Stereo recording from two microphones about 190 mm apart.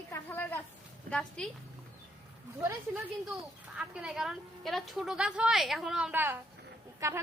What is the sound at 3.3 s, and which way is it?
A woman's voice, 5° right (ahead or behind).